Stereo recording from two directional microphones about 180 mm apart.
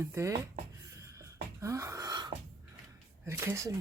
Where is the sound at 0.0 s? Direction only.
15° right (ahead or behind).